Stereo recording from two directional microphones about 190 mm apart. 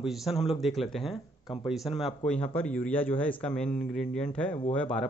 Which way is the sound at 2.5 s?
10° left (ahead or behind).